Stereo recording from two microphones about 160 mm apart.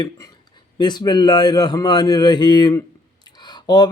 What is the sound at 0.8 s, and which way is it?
Speech, 25° left (ahead or behind).